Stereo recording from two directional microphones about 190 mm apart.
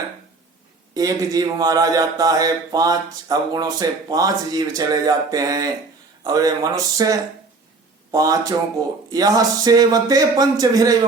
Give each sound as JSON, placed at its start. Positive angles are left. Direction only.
{"t": 0.9, "sound": "speech", "side_deg": -20}